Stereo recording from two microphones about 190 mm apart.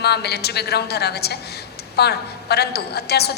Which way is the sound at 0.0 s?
60° left (ahead or behind).